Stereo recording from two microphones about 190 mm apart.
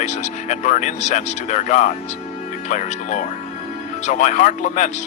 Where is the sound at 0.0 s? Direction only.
40° left (ahead or behind).